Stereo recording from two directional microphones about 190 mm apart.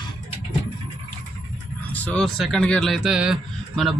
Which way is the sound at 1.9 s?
5° left (ahead or behind).